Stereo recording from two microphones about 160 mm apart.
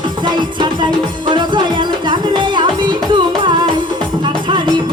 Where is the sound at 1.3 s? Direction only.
30° right (ahead or behind).